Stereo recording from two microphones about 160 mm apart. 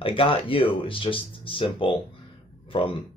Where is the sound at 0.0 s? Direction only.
35° left (ahead or behind).